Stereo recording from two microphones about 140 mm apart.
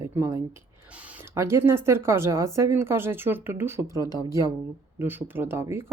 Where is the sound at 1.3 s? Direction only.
20° right (ahead or behind).